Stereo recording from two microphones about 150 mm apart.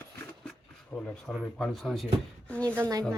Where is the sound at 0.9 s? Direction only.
5° left (ahead or behind).